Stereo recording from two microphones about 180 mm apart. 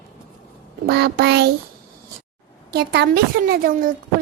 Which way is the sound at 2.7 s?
65° right (ahead or behind).